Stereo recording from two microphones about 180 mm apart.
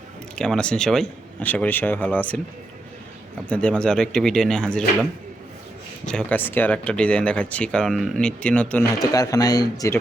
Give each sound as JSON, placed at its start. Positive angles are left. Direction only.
{"t": 0.3, "sound": "speech", "side_deg": 5}
{"t": 3.5, "sound": "speech", "side_deg": 5}
{"t": 6.1, "sound": "speech", "side_deg": 5}
{"t": 8.9, "sound": "speech", "side_deg": 20}